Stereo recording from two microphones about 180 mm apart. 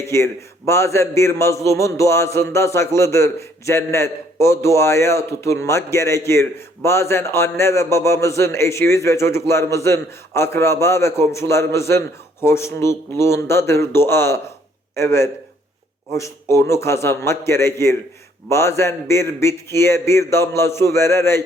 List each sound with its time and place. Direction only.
0.0 s a man's voice: 15° left (ahead or behind)